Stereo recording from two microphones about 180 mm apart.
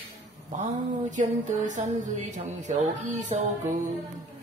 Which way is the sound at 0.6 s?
45° right (ahead or behind).